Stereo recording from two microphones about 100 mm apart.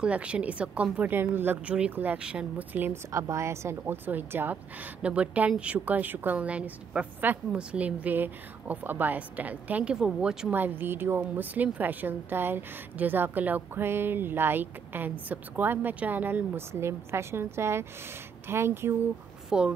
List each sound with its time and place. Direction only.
0.0 s a woman's voice: 10° right (ahead or behind)
2.8 s a woman's voice: 25° right (ahead or behind); by 10.5 s 5° right (ahead or behind)
10.5 s a woman's voice: 20° right (ahead or behind)
19.5 s a woman's voice: 5° right (ahead or behind)